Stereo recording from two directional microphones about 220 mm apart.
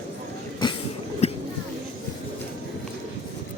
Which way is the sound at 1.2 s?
30° left (ahead or behind).